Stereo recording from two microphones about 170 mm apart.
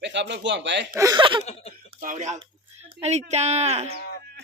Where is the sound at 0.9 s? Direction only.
20° right (ahead or behind).